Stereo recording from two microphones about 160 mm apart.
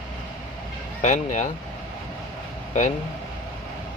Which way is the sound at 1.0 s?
45° left (ahead or behind).